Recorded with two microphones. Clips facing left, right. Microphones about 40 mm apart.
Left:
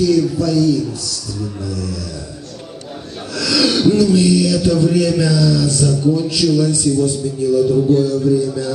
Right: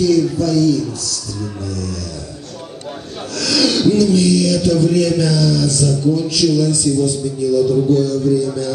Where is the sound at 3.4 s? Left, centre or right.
Left.